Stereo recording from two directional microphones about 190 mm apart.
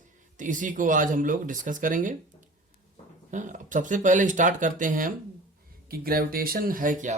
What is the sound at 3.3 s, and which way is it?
Speech, 40° right (ahead or behind).